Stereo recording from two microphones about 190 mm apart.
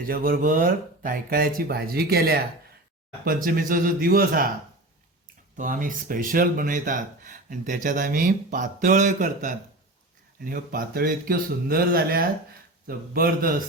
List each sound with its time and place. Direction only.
0.0 s speech: 50° right (ahead or behind)
5.5 s speech: 45° right (ahead or behind)